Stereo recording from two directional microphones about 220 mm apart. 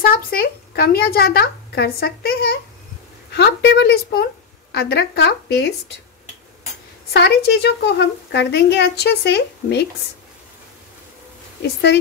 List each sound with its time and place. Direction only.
0.0 s a woman's voice: 45° left (ahead or behind)
7.1 s a woman's voice: 50° left (ahead or behind)
11.6 s a woman's voice: 50° left (ahead or behind)